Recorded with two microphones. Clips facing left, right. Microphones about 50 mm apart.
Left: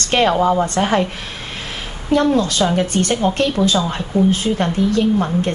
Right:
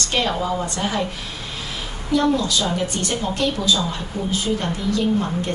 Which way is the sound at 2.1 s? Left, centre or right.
Left.